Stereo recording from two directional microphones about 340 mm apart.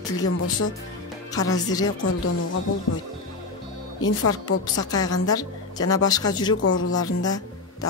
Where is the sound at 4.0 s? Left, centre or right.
Left.